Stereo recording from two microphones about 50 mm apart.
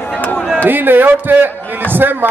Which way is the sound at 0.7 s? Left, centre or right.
Right.